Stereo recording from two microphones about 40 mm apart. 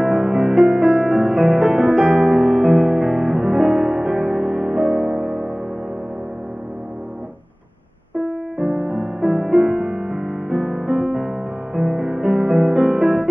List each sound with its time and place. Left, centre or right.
0.0 s music: centre
8.2 s music: centre